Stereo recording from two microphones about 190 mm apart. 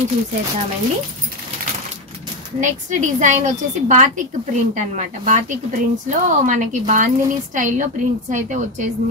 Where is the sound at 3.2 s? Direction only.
40° right (ahead or behind).